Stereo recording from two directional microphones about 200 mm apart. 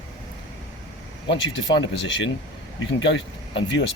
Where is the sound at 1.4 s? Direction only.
60° left (ahead or behind).